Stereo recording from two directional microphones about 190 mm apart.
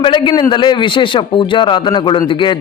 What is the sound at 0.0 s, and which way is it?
A man's voice, 25° left (ahead or behind).